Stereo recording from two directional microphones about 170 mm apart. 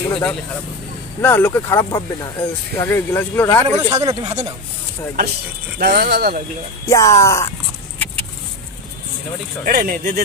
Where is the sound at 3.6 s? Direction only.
25° right (ahead or behind).